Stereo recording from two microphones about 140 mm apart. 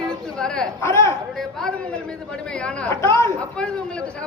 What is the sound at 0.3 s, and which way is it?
Speech, 5° left (ahead or behind).